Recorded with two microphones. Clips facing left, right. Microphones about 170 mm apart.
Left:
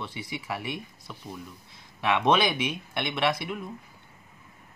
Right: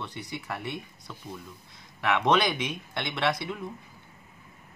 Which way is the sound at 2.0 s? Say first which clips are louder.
Left 1 dB; 10° left (ahead or behind).